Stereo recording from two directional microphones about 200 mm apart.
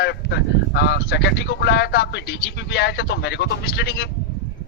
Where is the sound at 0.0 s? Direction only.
55° left (ahead or behind).